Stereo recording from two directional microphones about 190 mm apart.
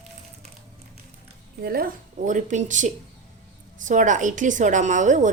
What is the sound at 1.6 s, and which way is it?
A woman's voice, 50° right (ahead or behind).